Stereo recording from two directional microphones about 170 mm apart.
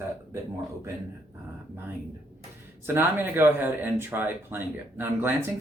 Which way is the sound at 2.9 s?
10° right (ahead or behind).